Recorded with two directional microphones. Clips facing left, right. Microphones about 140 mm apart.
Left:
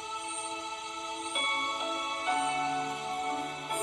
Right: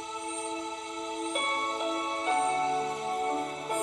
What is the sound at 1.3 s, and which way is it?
Music, 35° right (ahead or behind).